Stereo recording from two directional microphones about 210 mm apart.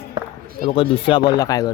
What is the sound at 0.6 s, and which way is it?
Speech, 25° left (ahead or behind).